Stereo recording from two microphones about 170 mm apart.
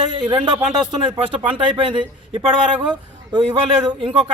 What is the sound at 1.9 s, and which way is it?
Speech, 25° right (ahead or behind).